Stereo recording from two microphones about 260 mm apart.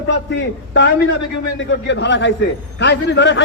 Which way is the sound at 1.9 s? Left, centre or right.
Left.